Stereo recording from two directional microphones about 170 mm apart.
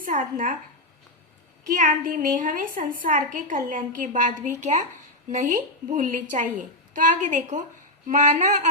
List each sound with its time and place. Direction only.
0.0 s a woman's voice: 50° right (ahead or behind)
1.6 s a woman's voice: 50° right (ahead or behind)